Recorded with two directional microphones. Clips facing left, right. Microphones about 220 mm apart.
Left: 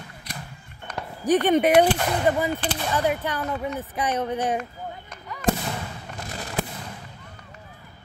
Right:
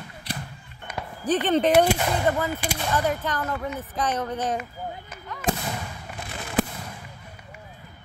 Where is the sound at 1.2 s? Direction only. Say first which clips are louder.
Left 3 dB; 15° left (ahead or behind).